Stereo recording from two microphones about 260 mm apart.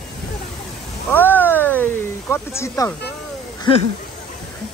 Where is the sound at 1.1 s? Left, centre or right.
Centre.